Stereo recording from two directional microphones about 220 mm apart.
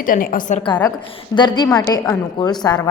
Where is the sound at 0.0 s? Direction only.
40° left (ahead or behind).